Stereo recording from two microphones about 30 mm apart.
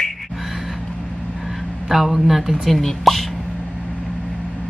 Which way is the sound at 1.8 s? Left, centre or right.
Centre.